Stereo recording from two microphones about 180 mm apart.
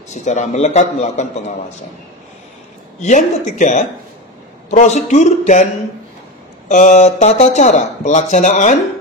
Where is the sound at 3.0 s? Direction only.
40° left (ahead or behind).